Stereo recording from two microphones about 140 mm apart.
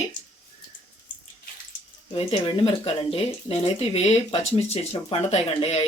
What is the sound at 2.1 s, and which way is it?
Speech, 45° left (ahead or behind).